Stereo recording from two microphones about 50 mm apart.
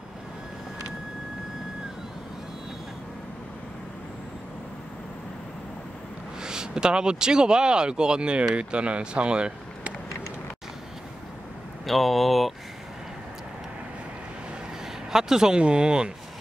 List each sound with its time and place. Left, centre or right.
6.4 s speech: centre
11.8 s speech: centre
15.1 s speech: centre